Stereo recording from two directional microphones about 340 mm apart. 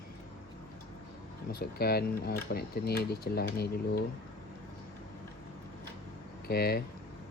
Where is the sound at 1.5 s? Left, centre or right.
Left.